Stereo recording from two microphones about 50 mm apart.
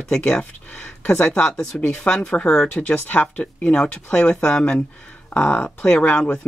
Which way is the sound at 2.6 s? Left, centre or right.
Left.